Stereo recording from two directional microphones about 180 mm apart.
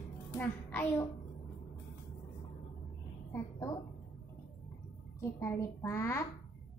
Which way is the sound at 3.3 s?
20° left (ahead or behind).